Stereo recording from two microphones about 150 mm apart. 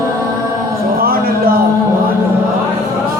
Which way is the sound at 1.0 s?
80° right.